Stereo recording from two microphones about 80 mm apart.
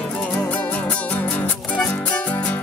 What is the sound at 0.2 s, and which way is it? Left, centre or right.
Music, centre.